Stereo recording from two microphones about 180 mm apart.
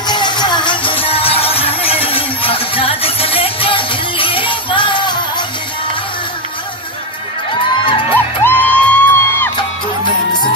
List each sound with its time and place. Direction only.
0.0 s music: 25° left (ahead or behind)
8.1 s music: 10° left (ahead or behind)
9.6 s music: 25° left (ahead or behind)